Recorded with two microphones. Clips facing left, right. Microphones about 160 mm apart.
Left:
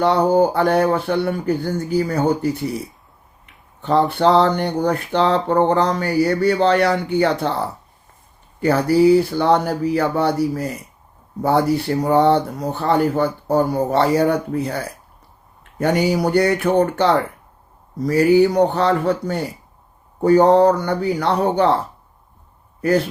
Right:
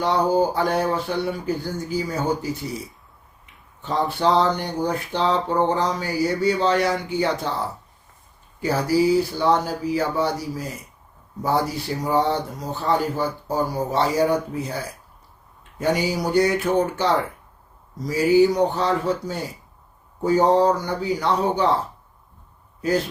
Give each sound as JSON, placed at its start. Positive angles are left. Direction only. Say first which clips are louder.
{"t": 0.0, "sound": "speech", "louder": "left 5 dB", "side_deg": 60}
{"t": 8.6, "sound": "speech", "louder": "left 6 dB", "side_deg": 60}
{"t": 12.0, "sound": "speech", "louder": "left 6 dB", "side_deg": 60}
{"t": 15.8, "sound": "speech", "louder": "left 5 dB", "side_deg": 60}